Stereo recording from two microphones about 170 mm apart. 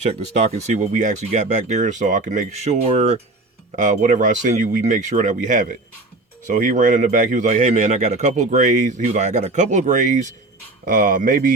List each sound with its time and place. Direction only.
0.6 s speech: 40° right (ahead or behind)